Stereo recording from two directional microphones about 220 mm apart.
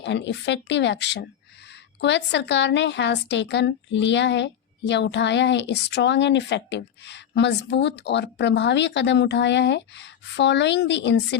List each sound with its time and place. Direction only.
0.0 s speech: 55° left (ahead or behind)